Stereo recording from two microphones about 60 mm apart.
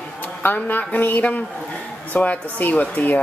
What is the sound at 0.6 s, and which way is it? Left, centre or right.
Speech, left.